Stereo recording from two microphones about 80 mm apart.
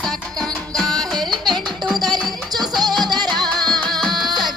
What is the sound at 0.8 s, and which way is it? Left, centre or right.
Music, centre.